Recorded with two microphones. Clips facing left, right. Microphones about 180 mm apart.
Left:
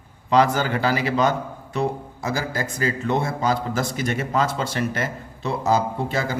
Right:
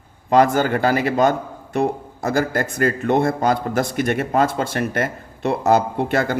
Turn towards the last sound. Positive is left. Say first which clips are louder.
# right 5 dB
turn(degrees=-65)  # may be behind; listen again after turning